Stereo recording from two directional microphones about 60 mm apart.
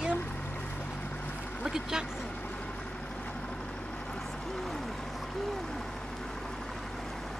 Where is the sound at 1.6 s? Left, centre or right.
Centre.